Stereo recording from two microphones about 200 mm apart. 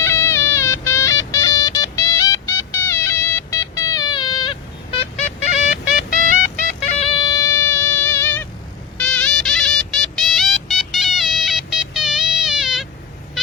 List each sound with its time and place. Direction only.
0.0 s music: 15° left (ahead or behind)